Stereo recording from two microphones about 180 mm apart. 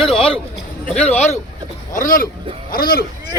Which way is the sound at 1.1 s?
40° left (ahead or behind).